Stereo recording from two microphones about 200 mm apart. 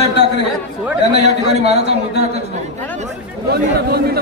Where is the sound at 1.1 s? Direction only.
35° right (ahead or behind).